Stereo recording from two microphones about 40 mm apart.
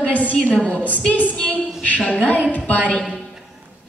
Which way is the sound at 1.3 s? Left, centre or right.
Left.